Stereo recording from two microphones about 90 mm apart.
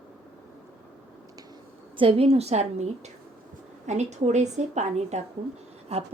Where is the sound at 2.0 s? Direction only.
90° right.